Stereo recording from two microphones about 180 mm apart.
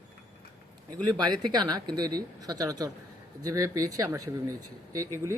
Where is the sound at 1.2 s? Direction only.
25° right (ahead or behind).